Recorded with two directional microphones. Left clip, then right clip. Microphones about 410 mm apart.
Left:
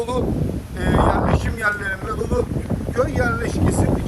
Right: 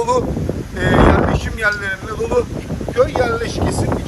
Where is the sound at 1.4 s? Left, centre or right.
Centre.